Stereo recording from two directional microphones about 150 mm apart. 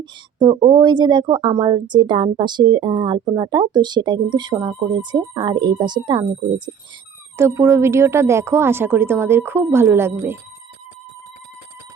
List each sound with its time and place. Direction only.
0.0 s speech: 30° right (ahead or behind)
7.3 s speech: 20° right (ahead or behind)